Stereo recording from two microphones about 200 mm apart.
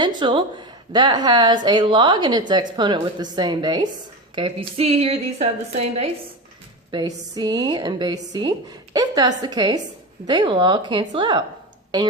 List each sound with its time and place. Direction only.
0.0 s a woman's voice: 25° right (ahead or behind)
6.9 s a woman's voice: 20° right (ahead or behind)